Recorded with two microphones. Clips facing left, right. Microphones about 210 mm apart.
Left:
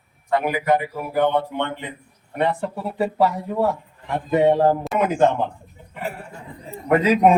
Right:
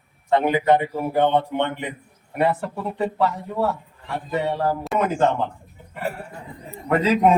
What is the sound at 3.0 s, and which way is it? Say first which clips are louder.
Speech: left 3 dB; 10° left (ahead or behind).